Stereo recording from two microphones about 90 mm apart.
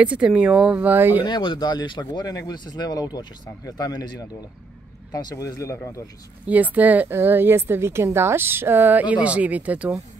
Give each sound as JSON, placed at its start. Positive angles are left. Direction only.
{"t": 0.0, "sound": "speech", "side_deg": -15}
{"t": 1.2, "sound": "speech", "side_deg": 60}
{"t": 6.4, "sound": "speech", "side_deg": -15}